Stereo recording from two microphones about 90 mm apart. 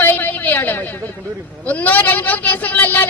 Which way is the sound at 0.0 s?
20° left (ahead or behind).